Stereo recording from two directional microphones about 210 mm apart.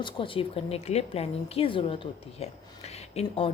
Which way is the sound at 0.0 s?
25° left (ahead or behind).